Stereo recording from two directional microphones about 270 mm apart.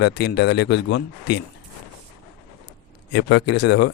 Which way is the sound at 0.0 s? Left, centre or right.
Left.